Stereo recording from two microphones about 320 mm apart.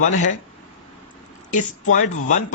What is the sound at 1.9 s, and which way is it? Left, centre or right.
Speech, left.